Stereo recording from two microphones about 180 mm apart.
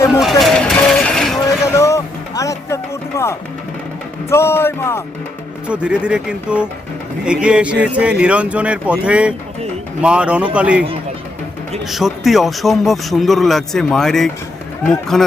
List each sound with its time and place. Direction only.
0.2 s vehicle: centre (ahead or behind)
1.6 s music: 15° left (ahead or behind)
4.3 s speech: 15° left (ahead or behind)
5.6 s speech: 5° right (ahead or behind)
11.9 s speech: centre (ahead or behind)